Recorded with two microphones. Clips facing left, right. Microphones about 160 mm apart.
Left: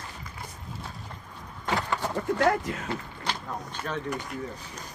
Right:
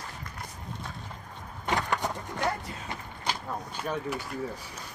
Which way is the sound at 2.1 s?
85° left.